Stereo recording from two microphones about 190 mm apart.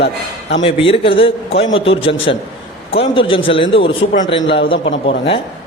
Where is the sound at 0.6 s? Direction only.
30° left (ahead or behind).